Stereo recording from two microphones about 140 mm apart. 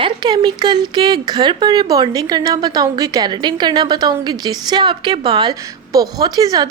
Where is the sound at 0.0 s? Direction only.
35° right (ahead or behind).